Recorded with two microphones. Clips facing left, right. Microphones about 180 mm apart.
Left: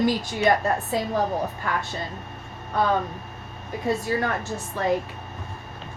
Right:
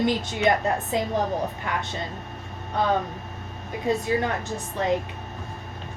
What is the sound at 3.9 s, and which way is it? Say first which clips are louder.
A woman's voice: right 1 dB; 20° right (ahead or behind).